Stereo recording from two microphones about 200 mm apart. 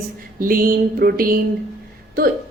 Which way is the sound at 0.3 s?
45° right (ahead or behind).